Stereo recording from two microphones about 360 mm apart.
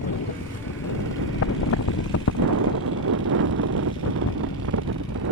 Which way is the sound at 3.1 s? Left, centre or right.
Right.